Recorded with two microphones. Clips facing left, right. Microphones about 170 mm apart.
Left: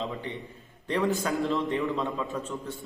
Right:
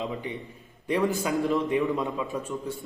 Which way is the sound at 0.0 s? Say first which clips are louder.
Right 2 dB; 15° right (ahead or behind).